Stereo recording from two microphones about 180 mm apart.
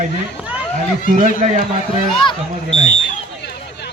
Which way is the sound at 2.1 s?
25° left (ahead or behind).